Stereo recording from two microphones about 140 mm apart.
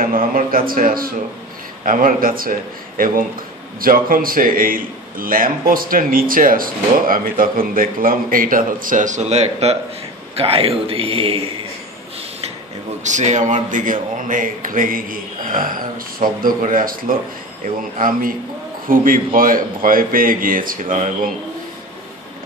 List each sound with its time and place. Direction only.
0.0 s a man's voice: 90° right; by 11.4 s 40° right (ahead or behind)
13.0 s a man's voice: 60° right (ahead or behind)